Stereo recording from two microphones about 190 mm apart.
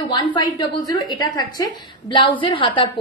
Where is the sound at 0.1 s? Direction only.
25° left (ahead or behind).